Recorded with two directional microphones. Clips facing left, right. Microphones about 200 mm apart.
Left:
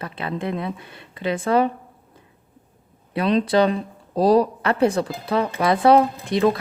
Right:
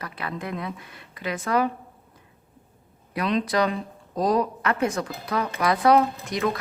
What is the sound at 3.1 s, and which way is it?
Speech, 30° left (ahead or behind).